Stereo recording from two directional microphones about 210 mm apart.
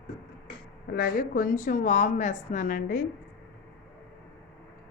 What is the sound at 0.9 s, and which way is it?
A woman's voice, 45° left (ahead or behind).